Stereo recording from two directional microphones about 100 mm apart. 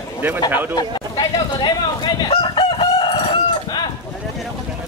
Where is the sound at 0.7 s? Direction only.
45° left (ahead or behind); by 3.8 s 60° left (ahead or behind).